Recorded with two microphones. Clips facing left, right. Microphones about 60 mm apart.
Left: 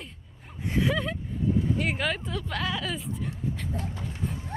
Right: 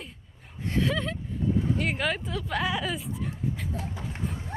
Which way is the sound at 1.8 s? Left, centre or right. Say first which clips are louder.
Even; centre.